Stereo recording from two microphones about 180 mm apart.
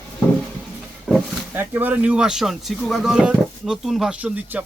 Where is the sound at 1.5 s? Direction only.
10° right (ahead or behind).